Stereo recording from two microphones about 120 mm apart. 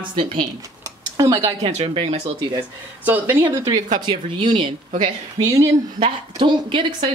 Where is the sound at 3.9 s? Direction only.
45° right (ahead or behind).